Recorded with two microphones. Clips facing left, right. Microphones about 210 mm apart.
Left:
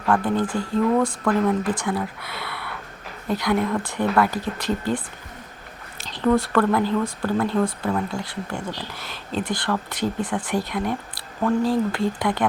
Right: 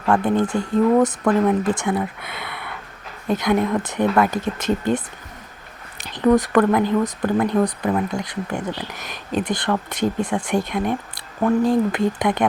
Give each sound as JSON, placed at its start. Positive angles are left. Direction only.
{"t": 0.1, "sound": "speech", "side_deg": -20}